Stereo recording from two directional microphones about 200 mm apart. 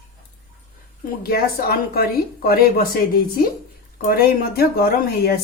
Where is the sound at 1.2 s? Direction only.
50° left (ahead or behind).